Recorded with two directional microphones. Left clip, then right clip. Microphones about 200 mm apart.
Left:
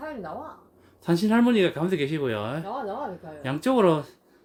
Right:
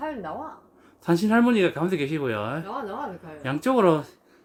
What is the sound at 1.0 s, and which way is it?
Speech, 5° right (ahead or behind).